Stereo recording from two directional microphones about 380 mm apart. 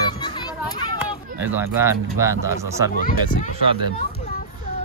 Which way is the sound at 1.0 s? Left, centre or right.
Centre.